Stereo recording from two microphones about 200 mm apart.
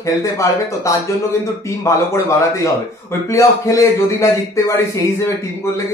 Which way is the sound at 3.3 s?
15° left (ahead or behind).